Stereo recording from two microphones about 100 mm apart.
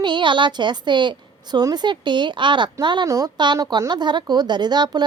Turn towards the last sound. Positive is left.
turn(degrees=-45)  # may be behind; listen again after turning